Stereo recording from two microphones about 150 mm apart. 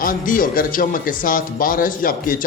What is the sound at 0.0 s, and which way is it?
Speech, 70° left (ahead or behind).